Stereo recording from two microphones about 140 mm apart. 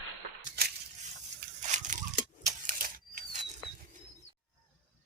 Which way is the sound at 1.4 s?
65° right (ahead or behind).